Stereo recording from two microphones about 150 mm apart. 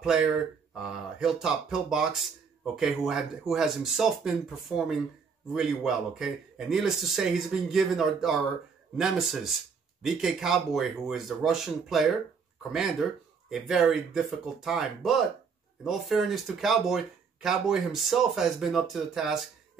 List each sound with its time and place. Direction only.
0.7 s speech: 5° right (ahead or behind)
13.5 s speech: 5° right (ahead or behind)